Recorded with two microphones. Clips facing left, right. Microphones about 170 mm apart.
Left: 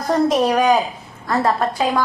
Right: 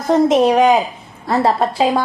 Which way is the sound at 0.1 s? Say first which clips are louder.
Right 4 dB; 25° right (ahead or behind).